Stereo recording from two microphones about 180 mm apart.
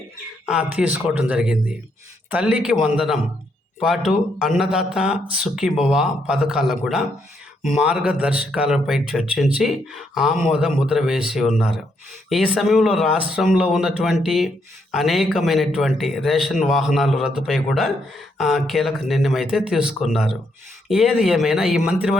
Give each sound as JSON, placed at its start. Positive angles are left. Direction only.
{"t": 0.4, "sound": "a man's voice", "side_deg": -5}